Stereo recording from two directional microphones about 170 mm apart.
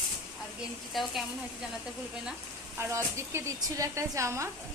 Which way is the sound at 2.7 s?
15° right (ahead or behind).